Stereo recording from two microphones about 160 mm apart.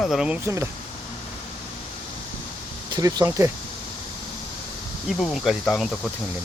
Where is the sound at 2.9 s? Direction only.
20° right (ahead or behind).